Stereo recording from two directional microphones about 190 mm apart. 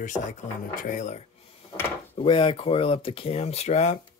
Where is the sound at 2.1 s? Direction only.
25° left (ahead or behind).